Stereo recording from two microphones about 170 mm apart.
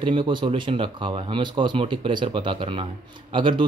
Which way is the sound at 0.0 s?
30° right (ahead or behind).